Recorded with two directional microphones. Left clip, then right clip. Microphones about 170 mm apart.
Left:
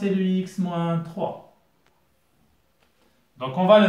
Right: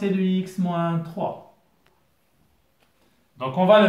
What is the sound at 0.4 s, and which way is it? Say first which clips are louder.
Speech: right 2 dB; 30° right (ahead or behind).